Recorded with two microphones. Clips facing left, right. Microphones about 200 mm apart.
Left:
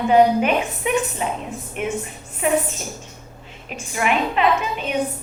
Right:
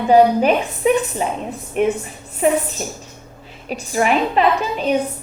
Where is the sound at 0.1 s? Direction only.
35° right (ahead or behind).